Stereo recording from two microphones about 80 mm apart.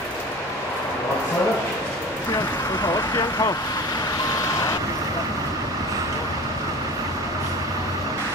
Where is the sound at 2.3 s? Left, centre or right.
Left.